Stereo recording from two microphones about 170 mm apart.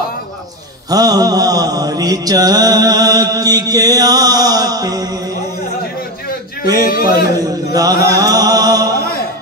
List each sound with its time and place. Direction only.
0.8 s mantra: 20° right (ahead or behind)
4.5 s chant: 20° right (ahead or behind)
6.8 s a man's voice: 60° left (ahead or behind)
7.3 s a sound: 20° right (ahead or behind)
8.1 s music: 20° right (ahead or behind)